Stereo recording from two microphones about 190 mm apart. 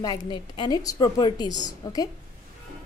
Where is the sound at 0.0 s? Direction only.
20° left (ahead or behind).